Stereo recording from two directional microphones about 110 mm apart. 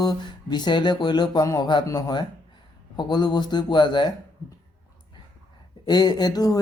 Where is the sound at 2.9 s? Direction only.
40° left (ahead or behind).